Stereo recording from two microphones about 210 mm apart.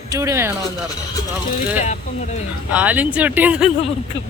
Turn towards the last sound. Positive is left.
turn(degrees=-5)  # may be behind; listen again after turning